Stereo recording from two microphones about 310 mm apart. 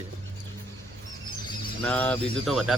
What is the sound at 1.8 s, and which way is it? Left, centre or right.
Speech, centre.